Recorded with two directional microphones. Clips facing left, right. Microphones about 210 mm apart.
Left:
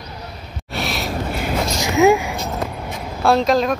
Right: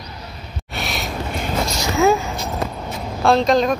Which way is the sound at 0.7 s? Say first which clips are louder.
Left 3 dB; centre (ahead or behind).